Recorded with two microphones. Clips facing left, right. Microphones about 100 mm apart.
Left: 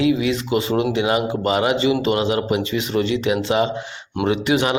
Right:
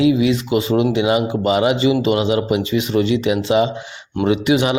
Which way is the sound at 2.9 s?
40° left (ahead or behind).